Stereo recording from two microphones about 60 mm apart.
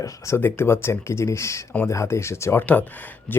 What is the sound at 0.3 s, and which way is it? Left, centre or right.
Speech, left.